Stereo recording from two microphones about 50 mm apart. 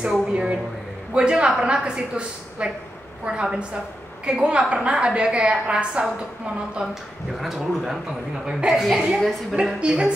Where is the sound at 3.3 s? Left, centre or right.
Right.